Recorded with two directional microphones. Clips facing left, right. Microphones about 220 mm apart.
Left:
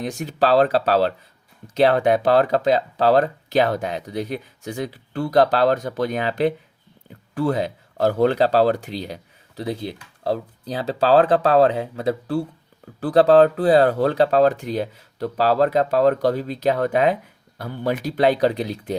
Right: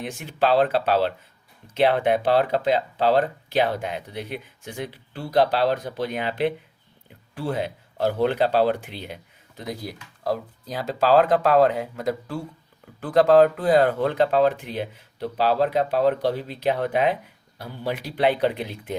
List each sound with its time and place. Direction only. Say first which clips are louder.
0.0 s speech: left 3 dB; 40° left (ahead or behind)